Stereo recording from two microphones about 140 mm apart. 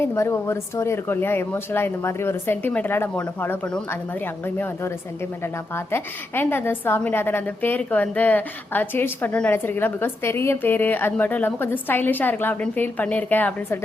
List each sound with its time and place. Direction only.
0.0 s a woman's voice: 20° left (ahead or behind)